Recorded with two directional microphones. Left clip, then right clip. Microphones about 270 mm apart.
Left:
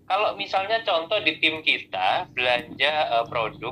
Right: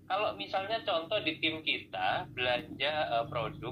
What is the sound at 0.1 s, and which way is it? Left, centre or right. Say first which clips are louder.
Speech: left 9 dB; left.